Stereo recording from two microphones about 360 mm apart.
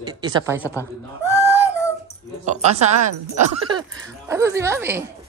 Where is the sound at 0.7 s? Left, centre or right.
Centre.